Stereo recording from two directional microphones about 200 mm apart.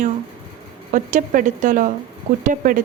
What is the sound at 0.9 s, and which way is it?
Speech, 40° right (ahead or behind).